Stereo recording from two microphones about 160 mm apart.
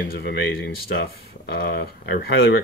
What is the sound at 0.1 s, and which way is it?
Speech, 85° left.